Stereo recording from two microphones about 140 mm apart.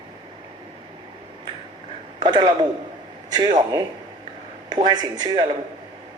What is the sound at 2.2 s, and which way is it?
A man's voice, 30° right (ahead or behind).